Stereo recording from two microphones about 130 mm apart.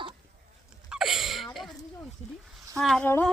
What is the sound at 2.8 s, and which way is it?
Speech, 5° left (ahead or behind).